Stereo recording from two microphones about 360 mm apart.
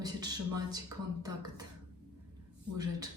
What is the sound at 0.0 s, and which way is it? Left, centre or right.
A man's voice, centre.